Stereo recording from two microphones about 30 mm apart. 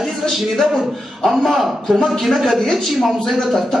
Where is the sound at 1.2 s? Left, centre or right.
Centre.